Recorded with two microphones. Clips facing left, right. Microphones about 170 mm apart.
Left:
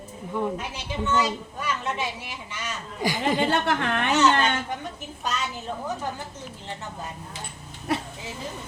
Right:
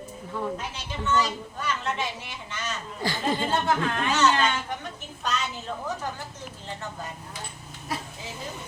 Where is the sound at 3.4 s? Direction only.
75° left (ahead or behind).